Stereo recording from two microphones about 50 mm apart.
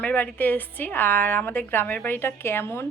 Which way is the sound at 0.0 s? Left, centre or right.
Left.